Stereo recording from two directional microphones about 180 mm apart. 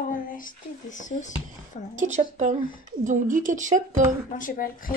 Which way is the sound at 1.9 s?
40° right (ahead or behind).